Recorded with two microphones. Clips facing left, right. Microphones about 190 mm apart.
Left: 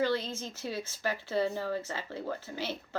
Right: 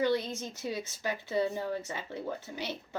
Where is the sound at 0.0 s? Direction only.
20° right (ahead or behind).